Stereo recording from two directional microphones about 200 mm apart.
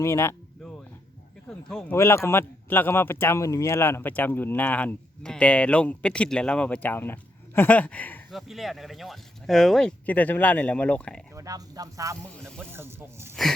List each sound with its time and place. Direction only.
0.0 s a sound: 15° left (ahead or behind)
1.5 s speech: 5° left (ahead or behind)
2.0 s a man's voice: 15° left (ahead or behind)
11.3 s speech: 15° right (ahead or behind)
12.3 s speech: 5° left (ahead or behind)
12.7 s speech: 10° right (ahead or behind)